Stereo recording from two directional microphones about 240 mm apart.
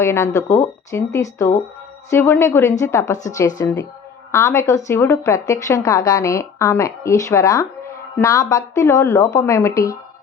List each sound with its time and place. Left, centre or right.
0.0 s a woman's voice: centre